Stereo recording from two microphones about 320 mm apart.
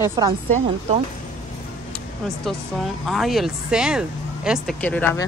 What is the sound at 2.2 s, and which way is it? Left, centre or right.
Speech, centre.